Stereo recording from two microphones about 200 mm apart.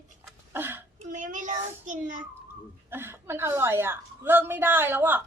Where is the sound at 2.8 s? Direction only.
10° right (ahead or behind).